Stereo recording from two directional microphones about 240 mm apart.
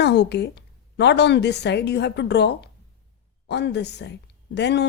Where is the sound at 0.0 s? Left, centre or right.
Left.